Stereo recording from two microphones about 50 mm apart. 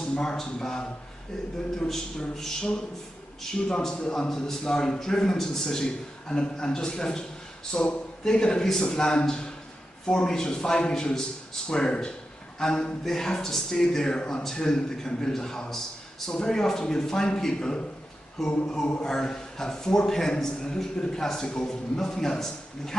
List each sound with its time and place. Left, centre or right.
0.0 s speech: centre
1.9 s a man's voice: centre
18.4 s a sound: centre
19.0 s speech: centre